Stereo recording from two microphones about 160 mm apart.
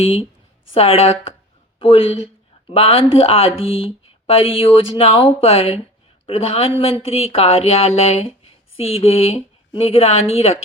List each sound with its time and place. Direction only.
0.0 s speech: 40° left (ahead or behind)